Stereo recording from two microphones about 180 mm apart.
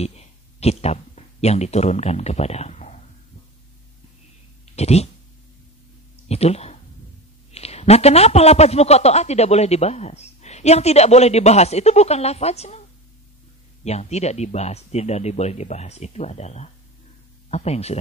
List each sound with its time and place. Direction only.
0.0 s speech: 35° left (ahead or behind)
4.7 s a man's voice: 35° left (ahead or behind)
6.2 s a man's voice: 35° left (ahead or behind)
13.8 s a man's voice: 35° left (ahead or behind)